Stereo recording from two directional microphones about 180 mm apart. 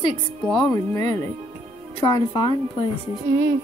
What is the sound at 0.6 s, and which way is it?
Speech, 20° left (ahead or behind).